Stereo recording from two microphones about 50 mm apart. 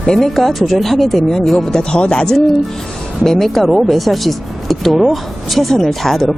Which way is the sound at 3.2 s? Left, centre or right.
Centre.